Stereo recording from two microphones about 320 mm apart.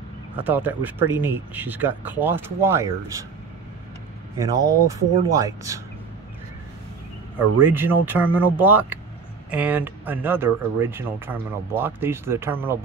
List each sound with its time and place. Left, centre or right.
0.4 s speech: centre
4.4 s speech: centre
7.3 s speech: centre